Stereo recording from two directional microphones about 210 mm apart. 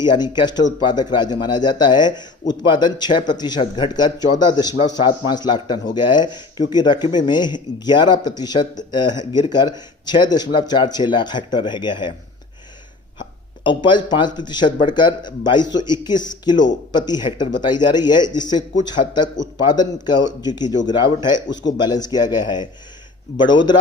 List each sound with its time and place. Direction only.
0.0 s speech: 20° left (ahead or behind)
13.7 s speech: 20° left (ahead or behind)